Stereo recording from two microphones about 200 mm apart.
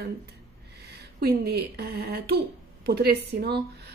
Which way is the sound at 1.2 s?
50° right (ahead or behind).